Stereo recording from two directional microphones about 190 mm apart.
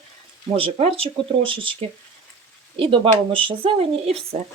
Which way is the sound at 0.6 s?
30° right (ahead or behind).